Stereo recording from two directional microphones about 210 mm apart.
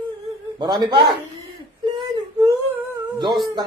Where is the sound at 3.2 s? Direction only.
20° right (ahead or behind).